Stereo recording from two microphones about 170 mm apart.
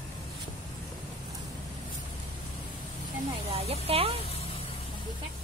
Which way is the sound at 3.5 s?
35° right (ahead or behind).